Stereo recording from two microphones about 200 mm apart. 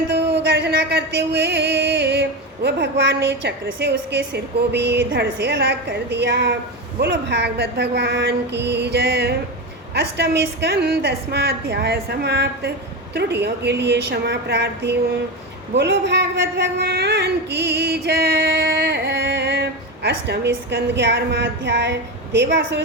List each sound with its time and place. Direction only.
0.1 s music: 55° right (ahead or behind)